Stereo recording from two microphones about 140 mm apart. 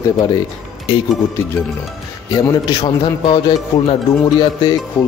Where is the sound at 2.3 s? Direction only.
30° left (ahead or behind).